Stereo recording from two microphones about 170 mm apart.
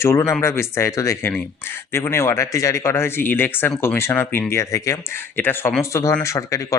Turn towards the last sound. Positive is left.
turn(degrees=20)  # may be behind; listen again after turning